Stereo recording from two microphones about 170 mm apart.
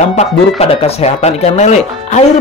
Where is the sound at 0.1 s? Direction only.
40° left (ahead or behind).